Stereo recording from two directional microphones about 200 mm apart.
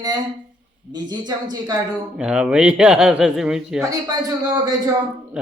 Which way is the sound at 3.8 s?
20° right (ahead or behind).